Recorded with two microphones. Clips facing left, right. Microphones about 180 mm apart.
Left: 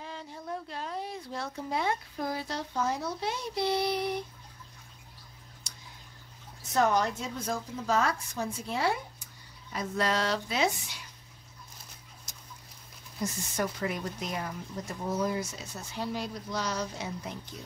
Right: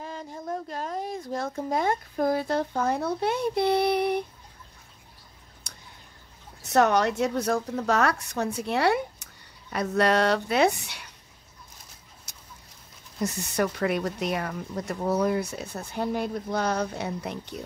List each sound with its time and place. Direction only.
0.0 s speech: 45° right (ahead or behind)
5.7 s clicking: 60° right (ahead or behind)
6.6 s a woman's voice: 70° right (ahead or behind)
13.2 s speech: 70° right (ahead or behind)